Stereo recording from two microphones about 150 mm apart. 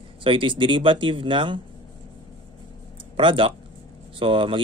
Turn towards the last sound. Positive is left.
turn(degrees=-35)  # may be behind; listen again after turning